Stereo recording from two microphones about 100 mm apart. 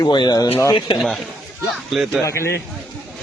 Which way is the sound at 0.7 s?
60° left (ahead or behind).